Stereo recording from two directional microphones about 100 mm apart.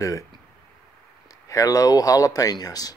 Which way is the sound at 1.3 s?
35° left (ahead or behind).